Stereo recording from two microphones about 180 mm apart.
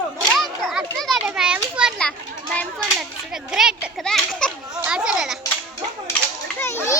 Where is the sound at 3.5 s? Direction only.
Centre (ahead or behind).